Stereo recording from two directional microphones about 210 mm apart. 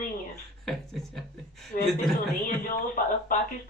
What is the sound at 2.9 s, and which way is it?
Speech, 40° left (ahead or behind).